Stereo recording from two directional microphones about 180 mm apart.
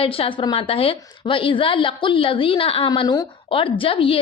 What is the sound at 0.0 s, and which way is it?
A woman's voice, 30° left (ahead or behind).